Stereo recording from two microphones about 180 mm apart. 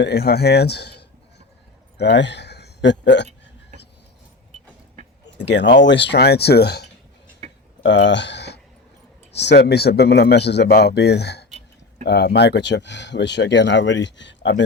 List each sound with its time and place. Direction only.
0.0 s speech: 60° left (ahead or behind)
5.2 s a sound: 75° left (ahead or behind)
5.8 s speech: 75° left (ahead or behind)
7.8 s a man's voice: 90° left; by 11.4 s 65° left (ahead or behind)
11.4 s a sound: 40° right (ahead or behind)
12.0 s speech: 65° left (ahead or behind); by 14.6 s 85° left